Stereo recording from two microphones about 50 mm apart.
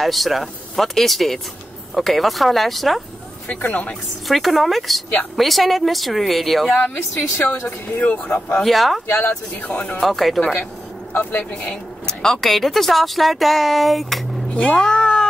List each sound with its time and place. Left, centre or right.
0.0 s a woman's voice: centre
3.6 s speech: left
4.3 s a woman's voice: centre
7.3 s speech: left
8.3 s speech: centre
8.6 s a woman's voice: centre
9.1 s speech: left
9.9 s a woman's voice: centre
11.1 s speech: left
11.7 s a woman's voice: centre
14.5 s cat: centre